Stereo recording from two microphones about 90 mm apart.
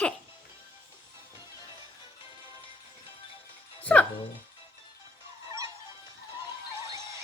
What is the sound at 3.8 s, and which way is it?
Music, 15° left (ahead or behind).